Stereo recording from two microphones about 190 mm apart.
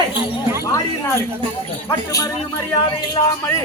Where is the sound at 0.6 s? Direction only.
15° left (ahead or behind).